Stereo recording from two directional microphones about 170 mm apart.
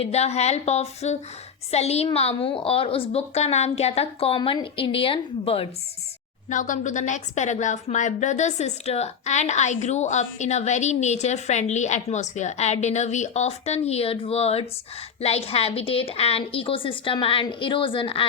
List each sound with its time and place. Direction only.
0.0 s a woman's voice: 40° left (ahead or behind)
6.5 s a woman's voice: 50° left (ahead or behind); by 18.3 s 30° left (ahead or behind)